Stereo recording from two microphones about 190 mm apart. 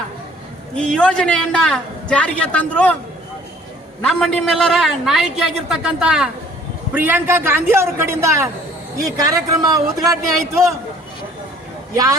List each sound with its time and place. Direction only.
0.8 s a man's voice: 5° left (ahead or behind)
4.0 s a man's voice: 5° left (ahead or behind); by 10.8 s 15° right (ahead or behind)